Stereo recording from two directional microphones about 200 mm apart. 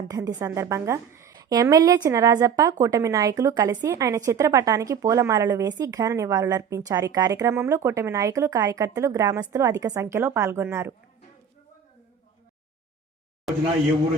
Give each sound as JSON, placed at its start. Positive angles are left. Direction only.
{"t": 0.1, "sound": "a woman's voice", "side_deg": -20}